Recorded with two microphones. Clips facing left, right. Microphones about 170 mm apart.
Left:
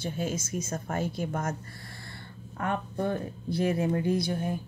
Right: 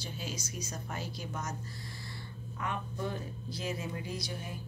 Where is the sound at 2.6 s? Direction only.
55° left (ahead or behind).